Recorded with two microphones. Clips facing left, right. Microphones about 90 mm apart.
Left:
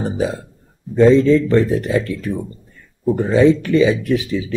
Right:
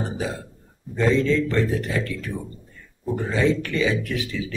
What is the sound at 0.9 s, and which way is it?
Speech, 20° left (ahead or behind).